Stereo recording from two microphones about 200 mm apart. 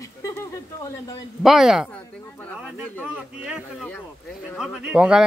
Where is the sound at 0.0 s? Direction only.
15° left (ahead or behind).